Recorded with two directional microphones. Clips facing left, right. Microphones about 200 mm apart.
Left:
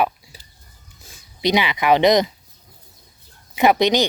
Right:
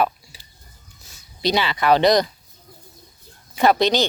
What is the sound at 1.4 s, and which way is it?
Speech, 15° left (ahead or behind).